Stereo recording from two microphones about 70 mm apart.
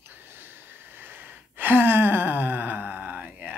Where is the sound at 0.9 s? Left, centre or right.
Right.